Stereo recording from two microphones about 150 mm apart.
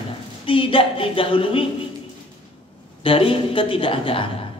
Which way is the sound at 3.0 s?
35° left (ahead or behind).